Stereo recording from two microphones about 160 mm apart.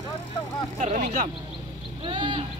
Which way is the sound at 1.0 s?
60° right (ahead or behind).